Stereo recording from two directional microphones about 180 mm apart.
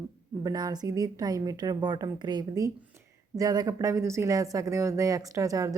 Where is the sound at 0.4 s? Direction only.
20° right (ahead or behind).